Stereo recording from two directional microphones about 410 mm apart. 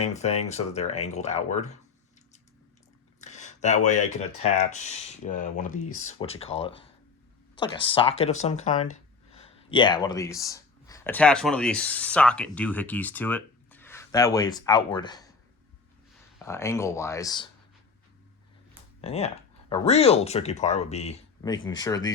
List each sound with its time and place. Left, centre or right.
0.0 s speech: centre
3.2 s a sound: centre
4.5 s speech: centre
5.9 s speech: left
6.4 s speech: centre
16.4 s speech: centre
19.0 s speech: centre